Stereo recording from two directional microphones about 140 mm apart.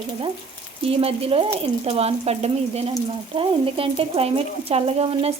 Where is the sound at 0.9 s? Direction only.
45° right (ahead or behind).